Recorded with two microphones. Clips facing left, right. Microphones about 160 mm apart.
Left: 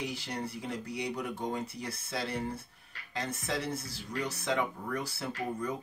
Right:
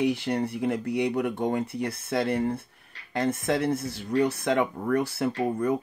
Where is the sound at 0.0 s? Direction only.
60° right (ahead or behind).